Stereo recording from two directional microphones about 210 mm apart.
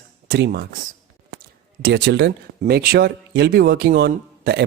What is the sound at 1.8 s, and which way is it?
Speech, 55° right (ahead or behind).